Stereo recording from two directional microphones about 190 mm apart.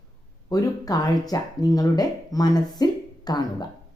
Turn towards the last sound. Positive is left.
turn(degrees=20)  # may be behind; listen again after turning